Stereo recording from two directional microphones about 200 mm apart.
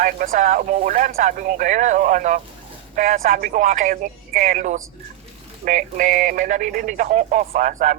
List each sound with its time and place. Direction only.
0.0 s speech: 45° right (ahead or behind)